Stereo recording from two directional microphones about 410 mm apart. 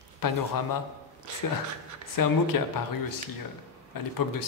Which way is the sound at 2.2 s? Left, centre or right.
Left.